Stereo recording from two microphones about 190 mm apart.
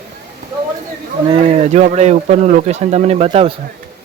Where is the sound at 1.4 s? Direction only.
35° right (ahead or behind).